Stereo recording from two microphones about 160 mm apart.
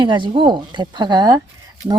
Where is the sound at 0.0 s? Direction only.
30° right (ahead or behind).